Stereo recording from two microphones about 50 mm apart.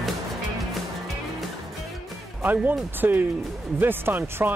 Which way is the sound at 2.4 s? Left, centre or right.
Right.